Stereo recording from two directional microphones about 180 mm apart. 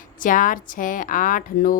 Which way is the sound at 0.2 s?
50° left (ahead or behind).